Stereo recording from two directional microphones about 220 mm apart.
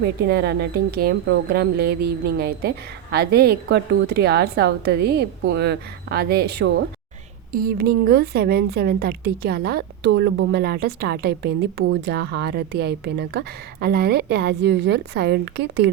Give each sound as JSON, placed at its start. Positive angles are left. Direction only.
{"t": 0.0, "sound": "speech", "side_deg": -45}